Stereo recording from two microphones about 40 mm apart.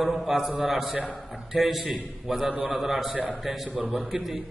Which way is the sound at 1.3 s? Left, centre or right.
Right.